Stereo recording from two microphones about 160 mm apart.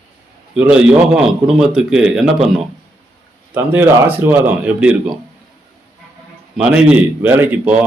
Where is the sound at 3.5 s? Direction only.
15° right (ahead or behind).